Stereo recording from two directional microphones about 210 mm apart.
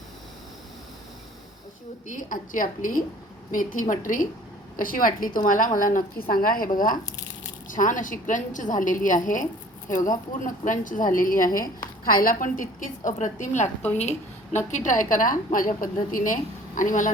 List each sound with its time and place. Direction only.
2.0 s a woman's voice: 40° left (ahead or behind)